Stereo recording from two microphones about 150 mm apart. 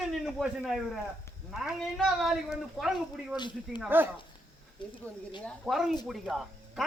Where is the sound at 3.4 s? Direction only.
30° left (ahead or behind).